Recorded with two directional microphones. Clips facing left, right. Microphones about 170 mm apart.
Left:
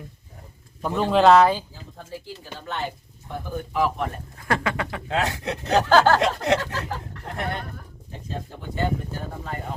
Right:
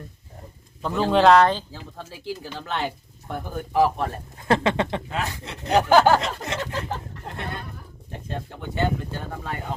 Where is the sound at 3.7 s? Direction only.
35° right (ahead or behind).